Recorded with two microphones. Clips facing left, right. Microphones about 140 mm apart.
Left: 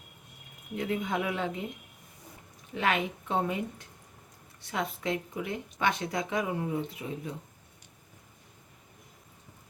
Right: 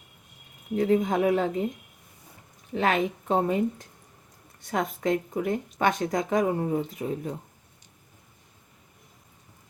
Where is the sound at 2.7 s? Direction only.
40° right (ahead or behind).